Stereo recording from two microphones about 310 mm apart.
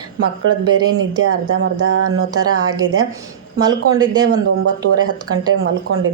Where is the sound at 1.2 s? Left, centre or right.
Right.